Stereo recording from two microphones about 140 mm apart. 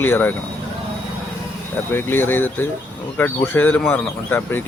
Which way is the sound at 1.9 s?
15° left (ahead or behind).